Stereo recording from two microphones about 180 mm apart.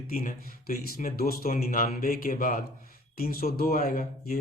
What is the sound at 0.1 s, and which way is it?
Speech, 55° left (ahead or behind).